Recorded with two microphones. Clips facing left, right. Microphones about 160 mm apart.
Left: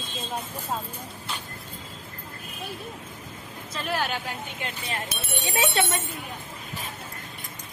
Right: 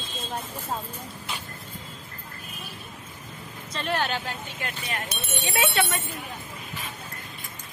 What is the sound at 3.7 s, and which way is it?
Speech, 5° left (ahead or behind).